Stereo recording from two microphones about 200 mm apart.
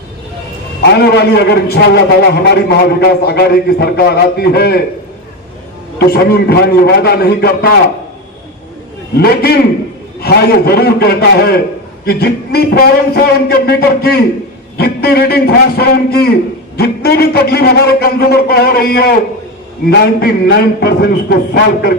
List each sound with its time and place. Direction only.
0.9 s a man's voice: 55° left (ahead or behind)
6.0 s a man's voice: 50° left (ahead or behind)
9.1 s a man's voice: 50° left (ahead or behind)